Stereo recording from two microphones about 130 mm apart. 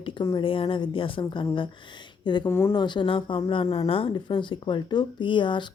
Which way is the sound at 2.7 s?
35° left (ahead or behind).